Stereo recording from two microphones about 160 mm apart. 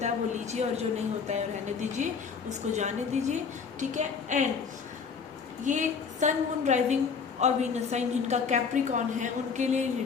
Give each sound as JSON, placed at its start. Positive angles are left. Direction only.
{"t": 0.0, "sound": "a woman's voice", "side_deg": -45}
{"t": 5.6, "sound": "a woman's voice", "side_deg": -50}